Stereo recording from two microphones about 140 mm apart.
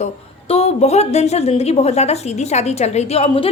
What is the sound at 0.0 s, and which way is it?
A woman's voice, 45° left (ahead or behind).